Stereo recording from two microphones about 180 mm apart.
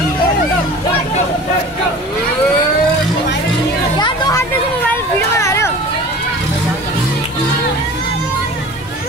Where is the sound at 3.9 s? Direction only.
25° left (ahead or behind).